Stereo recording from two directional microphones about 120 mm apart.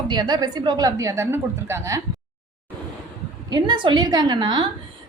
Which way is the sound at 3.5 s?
40° right (ahead or behind).